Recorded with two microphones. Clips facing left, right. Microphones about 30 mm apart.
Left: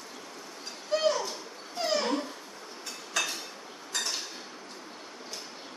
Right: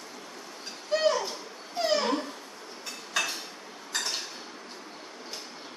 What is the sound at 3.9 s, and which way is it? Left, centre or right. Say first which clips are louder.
Dishes: right 1 dB; centre.